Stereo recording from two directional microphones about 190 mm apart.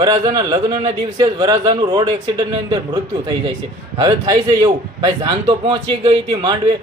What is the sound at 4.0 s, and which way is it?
A man's voice, 20° right (ahead or behind).